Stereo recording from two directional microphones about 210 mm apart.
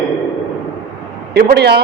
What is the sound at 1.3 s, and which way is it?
Speech, 50° right (ahead or behind).